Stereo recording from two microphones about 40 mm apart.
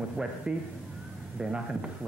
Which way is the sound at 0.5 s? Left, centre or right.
Centre.